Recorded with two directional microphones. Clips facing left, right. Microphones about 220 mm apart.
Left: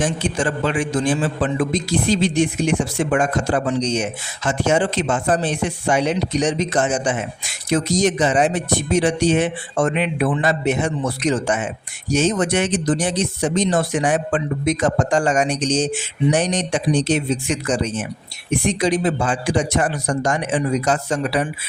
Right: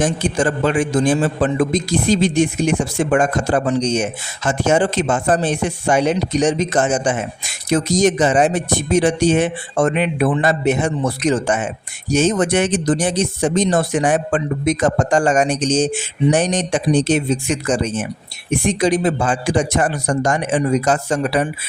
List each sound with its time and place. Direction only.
0.0 s a man's voice: 45° right (ahead or behind)